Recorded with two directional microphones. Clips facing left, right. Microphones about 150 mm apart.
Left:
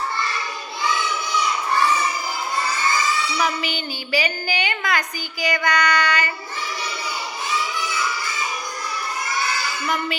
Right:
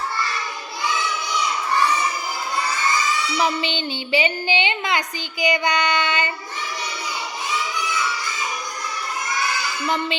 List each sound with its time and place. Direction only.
3.3 s speech: 25° right (ahead or behind)
9.8 s speech: 25° right (ahead or behind)